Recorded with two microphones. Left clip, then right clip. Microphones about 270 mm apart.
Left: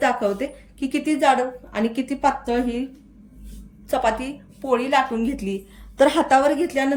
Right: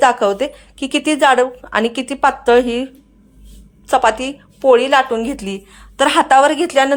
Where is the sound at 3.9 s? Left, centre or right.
Centre.